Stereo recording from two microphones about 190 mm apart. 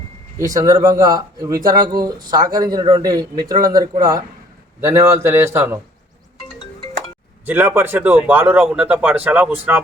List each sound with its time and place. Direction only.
0.3 s speech: 20° right (ahead or behind)
7.4 s speech: 10° right (ahead or behind)